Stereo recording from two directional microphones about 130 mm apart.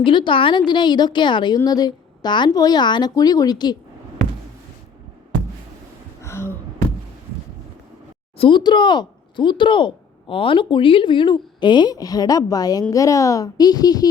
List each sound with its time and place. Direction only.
0.0 s speech: 40° left (ahead or behind)
6.2 s a sound: 20° left (ahead or behind)
8.4 s speech: 40° left (ahead or behind)